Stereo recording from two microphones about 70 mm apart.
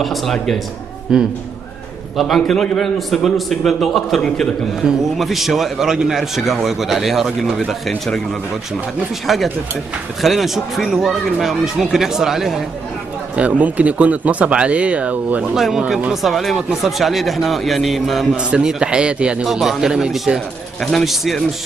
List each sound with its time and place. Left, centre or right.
0.0 s a man's voice: centre
1.1 s a man's voice: centre
2.1 s a man's voice: centre
9.3 s a man's voice: centre
13.4 s speech: centre
15.5 s a man's voice: centre
18.3 s a man's voice: centre